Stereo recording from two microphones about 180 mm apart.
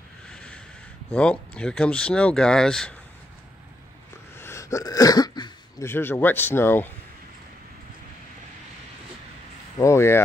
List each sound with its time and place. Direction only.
0.3 s a sound: 5° left (ahead or behind)
1.1 s speech: 5° left (ahead or behind)
4.4 s throat clearing: 15° left (ahead or behind)
5.9 s speech: 15° left (ahead or behind)
9.8 s speech: 15° left (ahead or behind)